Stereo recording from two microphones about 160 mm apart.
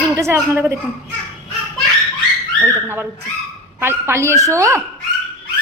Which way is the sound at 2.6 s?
15° right (ahead or behind).